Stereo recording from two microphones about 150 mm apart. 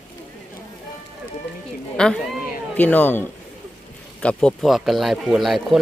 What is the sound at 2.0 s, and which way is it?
Speech, 5° left (ahead or behind).